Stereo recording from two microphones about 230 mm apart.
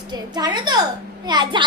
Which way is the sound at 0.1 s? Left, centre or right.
Centre.